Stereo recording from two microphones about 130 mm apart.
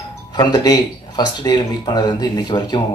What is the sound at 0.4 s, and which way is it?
Speech, 30° left (ahead or behind).